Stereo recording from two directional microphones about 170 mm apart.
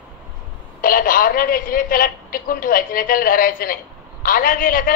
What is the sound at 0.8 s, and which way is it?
A woman's voice, 55° left (ahead or behind).